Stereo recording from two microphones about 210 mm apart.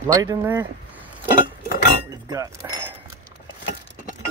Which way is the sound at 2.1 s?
15° right (ahead or behind).